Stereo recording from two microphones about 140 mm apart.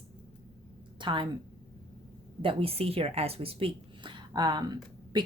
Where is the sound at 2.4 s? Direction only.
40° right (ahead or behind).